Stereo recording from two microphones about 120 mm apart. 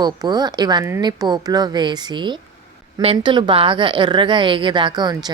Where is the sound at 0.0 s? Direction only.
35° right (ahead or behind).